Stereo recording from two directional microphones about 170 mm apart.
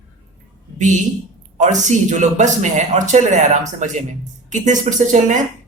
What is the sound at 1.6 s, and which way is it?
Speech, 45° right (ahead or behind).